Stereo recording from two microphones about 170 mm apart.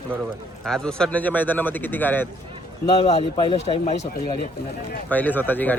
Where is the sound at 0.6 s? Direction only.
5° left (ahead or behind).